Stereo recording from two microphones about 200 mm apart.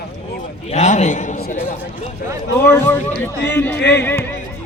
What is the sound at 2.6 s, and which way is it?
A man's voice, 10° left (ahead or behind).